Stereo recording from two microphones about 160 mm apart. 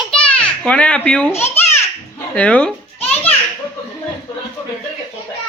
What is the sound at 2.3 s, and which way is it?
Speech, 10° left (ahead or behind).